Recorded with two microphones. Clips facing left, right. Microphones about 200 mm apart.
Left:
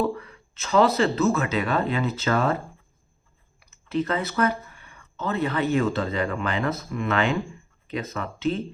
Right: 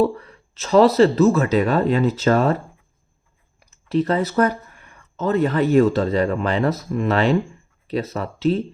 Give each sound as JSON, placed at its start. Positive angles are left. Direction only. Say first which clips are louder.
{"t": 0.0, "sound": "speech", "louder": "right 6 dB", "side_deg": -35}
{"t": 3.6, "sound": "speech", "louder": "right 5 dB", "side_deg": -40}